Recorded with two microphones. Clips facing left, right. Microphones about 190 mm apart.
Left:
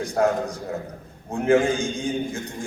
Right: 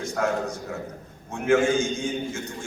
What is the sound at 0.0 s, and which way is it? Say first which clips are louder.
A man's voice: left 4 dB; 35° left (ahead or behind).